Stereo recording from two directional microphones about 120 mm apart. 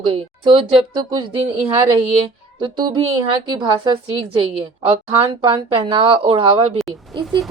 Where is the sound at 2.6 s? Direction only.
40° right (ahead or behind).